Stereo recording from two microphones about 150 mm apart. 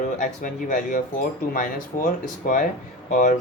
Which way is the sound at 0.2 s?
60° left (ahead or behind).